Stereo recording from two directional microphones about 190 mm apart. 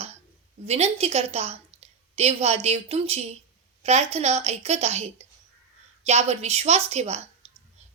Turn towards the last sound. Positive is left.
turn(degrees=-35)  # may be behind; listen again after turning